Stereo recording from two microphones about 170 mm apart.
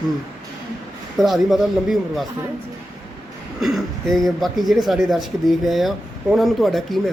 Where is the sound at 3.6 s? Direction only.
Centre (ahead or behind).